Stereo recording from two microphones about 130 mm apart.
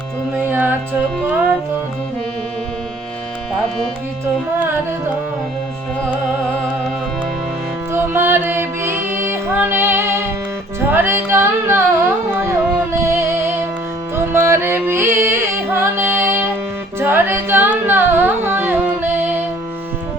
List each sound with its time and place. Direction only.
0.4 s music: 15° right (ahead or behind)
7.9 s music: 15° right (ahead or behind)
17.0 s carnatic music: 15° right (ahead or behind)